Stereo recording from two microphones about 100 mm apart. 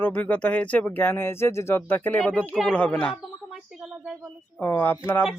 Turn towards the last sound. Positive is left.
turn(degrees=20)  # may be behind; listen again after turning